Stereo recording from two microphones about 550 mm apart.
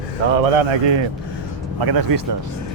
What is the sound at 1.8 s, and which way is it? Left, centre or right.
Speech, right.